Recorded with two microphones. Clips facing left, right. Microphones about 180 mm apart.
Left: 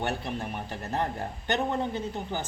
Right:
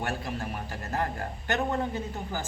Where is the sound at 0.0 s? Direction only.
25° left (ahead or behind).